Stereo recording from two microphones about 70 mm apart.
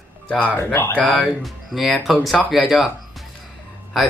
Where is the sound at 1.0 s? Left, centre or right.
Centre.